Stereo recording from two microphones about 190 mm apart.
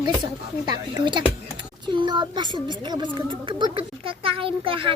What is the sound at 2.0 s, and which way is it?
Speech, 25° right (ahead or behind).